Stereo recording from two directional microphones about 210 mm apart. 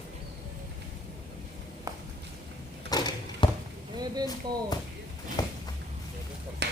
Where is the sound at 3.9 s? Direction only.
20° right (ahead or behind).